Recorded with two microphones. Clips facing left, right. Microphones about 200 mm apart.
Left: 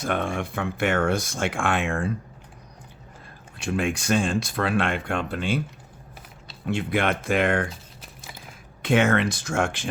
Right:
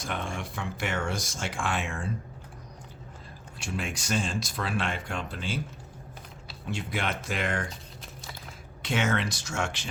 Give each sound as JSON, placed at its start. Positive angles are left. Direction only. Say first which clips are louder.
{"t": 0.0, "sound": "speech", "louder": "left 8 dB", "side_deg": 60}
{"t": 3.6, "sound": "speech", "louder": "left 9 dB", "side_deg": 55}
{"t": 6.7, "sound": "speech", "louder": "left 8 dB", "side_deg": 60}
{"t": 8.8, "sound": "speech", "louder": "left 8 dB", "side_deg": 55}